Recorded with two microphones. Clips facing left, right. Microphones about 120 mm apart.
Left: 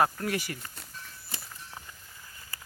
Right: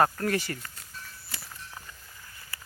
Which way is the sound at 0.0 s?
10° left (ahead or behind).